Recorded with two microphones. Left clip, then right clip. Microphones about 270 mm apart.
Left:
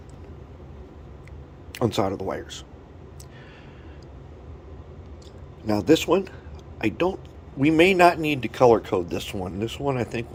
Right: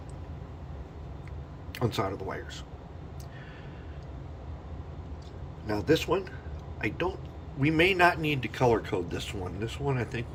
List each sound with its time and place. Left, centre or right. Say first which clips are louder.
1.7 s speech: left 7 dB; left
5.6 s speech: left 7 dB; left